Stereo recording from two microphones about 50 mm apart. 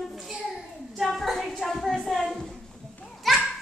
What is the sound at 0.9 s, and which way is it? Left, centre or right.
A woman's voice, centre.